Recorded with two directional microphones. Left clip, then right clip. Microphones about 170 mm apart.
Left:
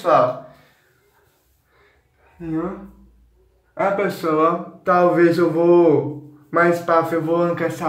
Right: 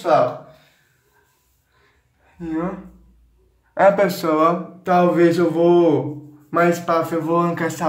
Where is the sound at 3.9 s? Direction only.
30° right (ahead or behind).